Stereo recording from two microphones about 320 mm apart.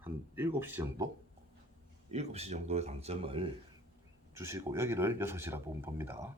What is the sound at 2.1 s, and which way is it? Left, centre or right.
Speech, centre.